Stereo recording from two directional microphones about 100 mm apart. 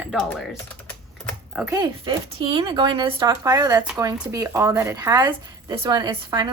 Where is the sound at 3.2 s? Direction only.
35° right (ahead or behind).